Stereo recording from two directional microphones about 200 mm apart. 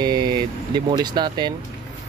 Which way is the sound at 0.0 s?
20° right (ahead or behind).